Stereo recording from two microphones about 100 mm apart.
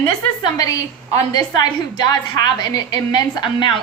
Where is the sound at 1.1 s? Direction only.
40° left (ahead or behind).